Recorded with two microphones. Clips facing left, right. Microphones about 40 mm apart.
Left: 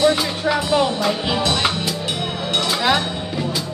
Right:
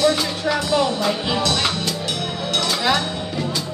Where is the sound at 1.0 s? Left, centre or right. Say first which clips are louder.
Left 1 dB; centre.